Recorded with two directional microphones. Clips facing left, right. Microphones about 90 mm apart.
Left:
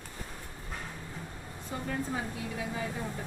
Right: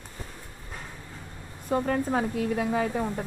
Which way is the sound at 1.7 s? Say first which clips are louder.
Right 9 dB; 55° right (ahead or behind).